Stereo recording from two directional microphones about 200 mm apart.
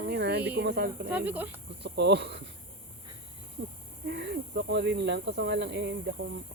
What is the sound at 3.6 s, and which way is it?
Snake, 75° right (ahead or behind).